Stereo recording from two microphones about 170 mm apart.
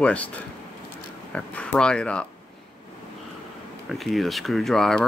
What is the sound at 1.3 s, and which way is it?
Speech, 5° left (ahead or behind).